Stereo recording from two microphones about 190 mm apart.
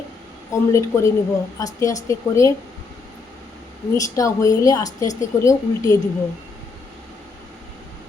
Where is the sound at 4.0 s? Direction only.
15° left (ahead or behind).